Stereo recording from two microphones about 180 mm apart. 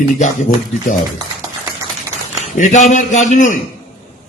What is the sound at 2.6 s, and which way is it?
Speech, 40° left (ahead or behind).